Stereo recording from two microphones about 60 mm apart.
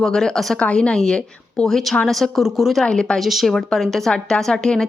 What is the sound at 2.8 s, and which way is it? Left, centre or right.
Speech, centre.